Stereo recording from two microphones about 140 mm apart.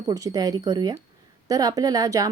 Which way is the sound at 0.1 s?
25° right (ahead or behind).